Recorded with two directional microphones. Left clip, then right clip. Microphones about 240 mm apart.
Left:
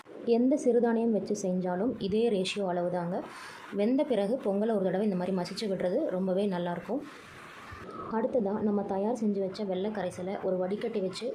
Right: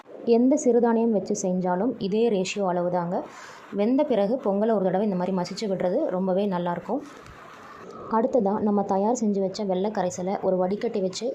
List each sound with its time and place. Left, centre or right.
0.3 s a woman's voice: centre
8.1 s a woman's voice: centre